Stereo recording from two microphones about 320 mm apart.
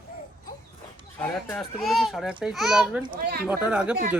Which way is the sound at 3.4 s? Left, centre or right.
Centre.